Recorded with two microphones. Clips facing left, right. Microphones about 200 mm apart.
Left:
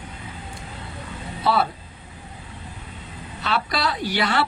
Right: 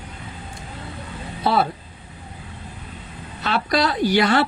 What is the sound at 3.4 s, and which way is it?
Speech, 45° right (ahead or behind).